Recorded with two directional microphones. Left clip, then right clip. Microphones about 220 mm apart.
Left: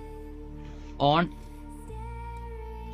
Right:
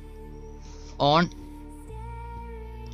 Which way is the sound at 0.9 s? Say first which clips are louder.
Right 2 dB; centre (ahead or behind).